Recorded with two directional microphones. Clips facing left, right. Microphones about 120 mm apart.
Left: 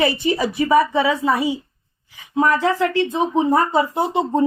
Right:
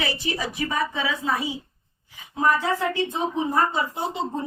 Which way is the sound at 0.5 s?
65° left (ahead or behind).